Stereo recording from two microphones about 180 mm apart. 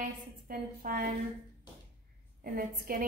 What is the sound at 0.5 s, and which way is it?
Speech, 55° right (ahead or behind).